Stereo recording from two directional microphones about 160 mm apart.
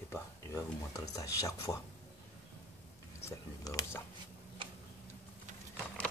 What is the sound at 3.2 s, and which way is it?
Speech, 20° left (ahead or behind).